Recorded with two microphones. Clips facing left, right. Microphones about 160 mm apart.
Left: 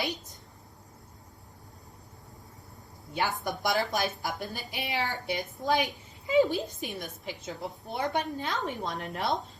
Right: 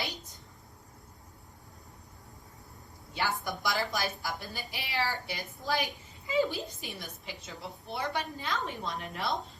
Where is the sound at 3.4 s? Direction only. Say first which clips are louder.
Left 4 dB; 55° left (ahead or behind).